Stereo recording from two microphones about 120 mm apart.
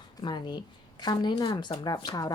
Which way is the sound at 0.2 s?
40° left (ahead or behind).